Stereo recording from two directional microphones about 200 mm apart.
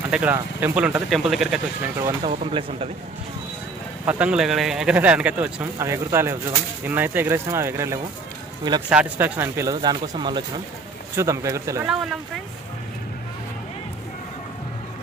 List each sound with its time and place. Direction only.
0.1 s speech: 10° right (ahead or behind)
2.0 s speech: 15° right (ahead or behind)
2.3 s speech: 25° right (ahead or behind)
4.0 s speech: 5° right (ahead or behind)
11.9 s speech: centre (ahead or behind)